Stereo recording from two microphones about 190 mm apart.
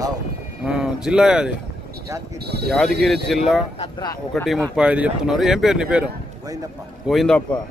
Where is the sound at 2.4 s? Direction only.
60° right (ahead or behind).